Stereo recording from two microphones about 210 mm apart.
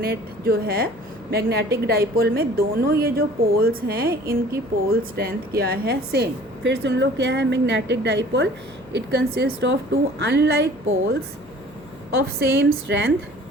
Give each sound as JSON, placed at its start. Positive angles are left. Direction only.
{"t": 0.0, "sound": "a woman's voice", "side_deg": -45}
{"t": 12.1, "sound": "a woman's voice", "side_deg": -60}